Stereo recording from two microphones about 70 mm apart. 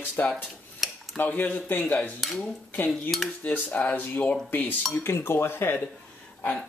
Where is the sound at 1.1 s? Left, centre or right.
Left.